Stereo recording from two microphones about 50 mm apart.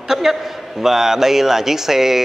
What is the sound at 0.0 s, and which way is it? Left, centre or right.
A man's voice, centre.